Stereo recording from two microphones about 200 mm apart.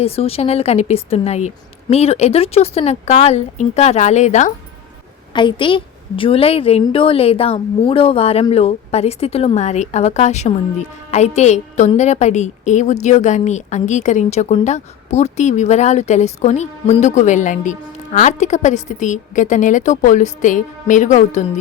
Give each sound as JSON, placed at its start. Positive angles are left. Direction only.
{"t": 0.0, "sound": "a woman's voice", "side_deg": 30}
{"t": 5.3, "sound": "a woman's voice", "side_deg": 25}